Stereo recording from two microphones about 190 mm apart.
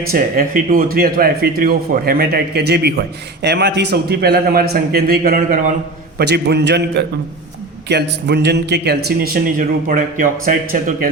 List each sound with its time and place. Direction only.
0.1 s a man's voice: 45° right (ahead or behind)
6.1 s a man's voice: 60° right (ahead or behind)